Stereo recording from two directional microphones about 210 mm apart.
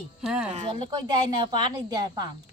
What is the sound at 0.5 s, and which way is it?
Speech, 25° right (ahead or behind).